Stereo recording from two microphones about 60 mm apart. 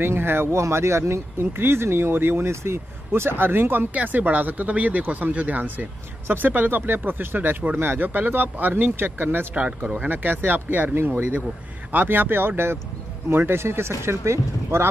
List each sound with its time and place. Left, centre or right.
0.0 s speech: right
3.9 s speech: right